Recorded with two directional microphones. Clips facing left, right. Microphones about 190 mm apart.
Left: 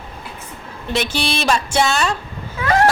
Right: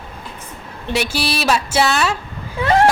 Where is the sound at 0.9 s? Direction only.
10° right (ahead or behind).